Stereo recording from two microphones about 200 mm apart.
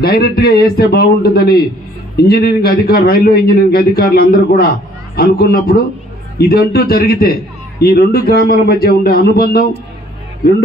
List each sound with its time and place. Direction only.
0.0 s a man's voice: 50° left (ahead or behind)